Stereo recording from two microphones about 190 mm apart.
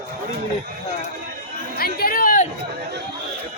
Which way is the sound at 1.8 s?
50° left (ahead or behind).